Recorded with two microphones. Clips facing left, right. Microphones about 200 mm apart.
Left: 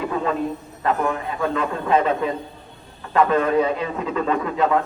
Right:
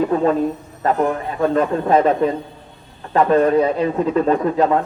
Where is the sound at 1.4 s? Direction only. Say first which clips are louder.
Right 10 dB; 40° right (ahead or behind).